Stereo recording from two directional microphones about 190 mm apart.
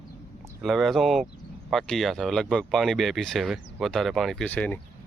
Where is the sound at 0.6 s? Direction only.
Centre (ahead or behind).